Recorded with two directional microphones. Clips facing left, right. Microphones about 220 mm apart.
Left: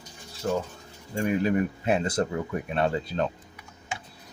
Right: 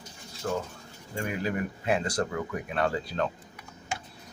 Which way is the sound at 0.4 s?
25° left (ahead or behind).